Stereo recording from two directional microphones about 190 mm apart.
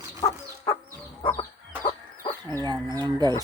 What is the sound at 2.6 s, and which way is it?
Chicken, 25° right (ahead or behind).